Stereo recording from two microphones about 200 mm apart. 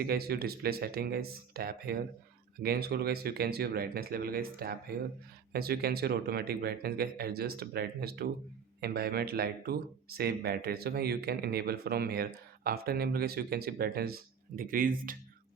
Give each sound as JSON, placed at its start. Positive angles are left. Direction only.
{"t": 0.0, "sound": "speech", "side_deg": -50}